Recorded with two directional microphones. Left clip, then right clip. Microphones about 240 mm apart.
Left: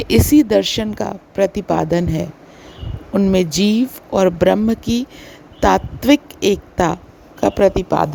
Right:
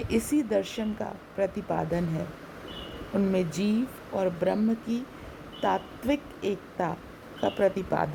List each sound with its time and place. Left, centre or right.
0.1 s a woman's voice: left